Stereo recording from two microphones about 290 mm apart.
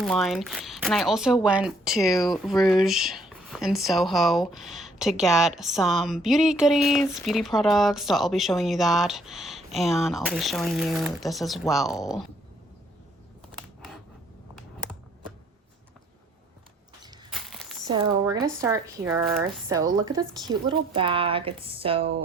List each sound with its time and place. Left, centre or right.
0.0 s a woman's voice: centre
17.3 s a sound: centre
17.8 s a woman's voice: centre